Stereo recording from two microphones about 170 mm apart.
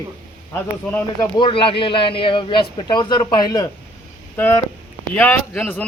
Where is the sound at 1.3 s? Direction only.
30° left (ahead or behind).